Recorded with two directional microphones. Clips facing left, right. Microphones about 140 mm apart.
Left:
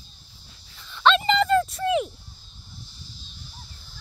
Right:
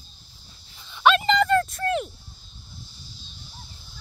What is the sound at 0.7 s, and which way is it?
Dog, 15° right (ahead or behind).